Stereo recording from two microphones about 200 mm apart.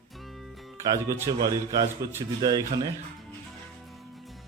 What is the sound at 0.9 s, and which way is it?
Speech, 15° right (ahead or behind).